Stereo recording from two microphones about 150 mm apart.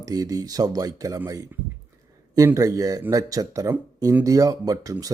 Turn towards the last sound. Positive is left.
turn(degrees=-25)  # may be behind; listen again after turning